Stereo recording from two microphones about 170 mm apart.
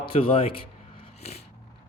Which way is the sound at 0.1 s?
35° left (ahead or behind).